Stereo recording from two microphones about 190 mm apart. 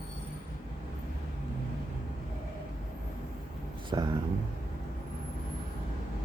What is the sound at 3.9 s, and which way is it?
Speech, 20° right (ahead or behind).